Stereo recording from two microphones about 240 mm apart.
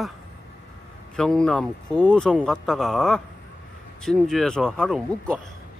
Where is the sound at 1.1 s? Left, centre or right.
Centre.